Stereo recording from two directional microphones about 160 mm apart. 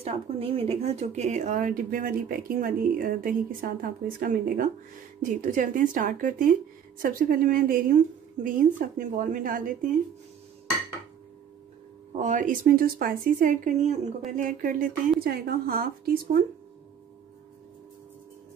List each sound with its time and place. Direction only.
0.0 s speech: 35° right (ahead or behind); by 9.7 s 55° right (ahead or behind)
12.2 s speech: 50° right (ahead or behind); by 15.9 s 65° right (ahead or behind)